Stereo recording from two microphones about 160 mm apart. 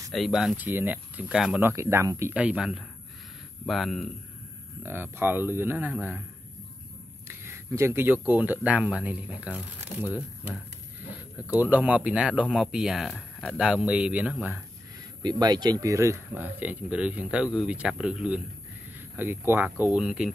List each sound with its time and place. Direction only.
0.1 s speech: centre (ahead or behind)
1.6 s speech: 15° right (ahead or behind); by 4.1 s centre (ahead or behind)
4.8 s speech: 15° right (ahead or behind)
7.2 s speech: 15° right (ahead or behind)
11.5 s speech: 10° right (ahead or behind); by 13.6 s 5° left (ahead or behind)
13.6 s speech: 5° right (ahead or behind)
15.2 s speech: 25° right (ahead or behind); by 20.2 s 5° right (ahead or behind)